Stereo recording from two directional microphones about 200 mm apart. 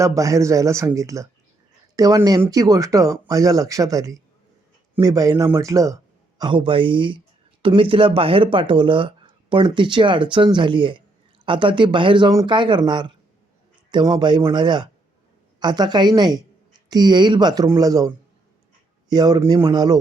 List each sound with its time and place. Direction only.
0.0 s speech: 15° right (ahead or behind)
19.1 s speech: 20° right (ahead or behind)